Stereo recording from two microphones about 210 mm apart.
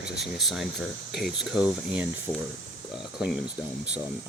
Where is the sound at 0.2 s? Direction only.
Centre (ahead or behind).